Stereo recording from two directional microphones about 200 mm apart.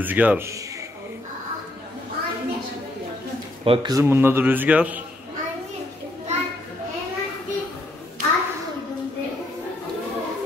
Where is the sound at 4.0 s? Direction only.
10° right (ahead or behind).